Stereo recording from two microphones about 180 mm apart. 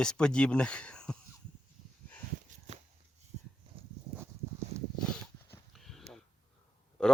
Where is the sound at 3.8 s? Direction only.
30° right (ahead or behind).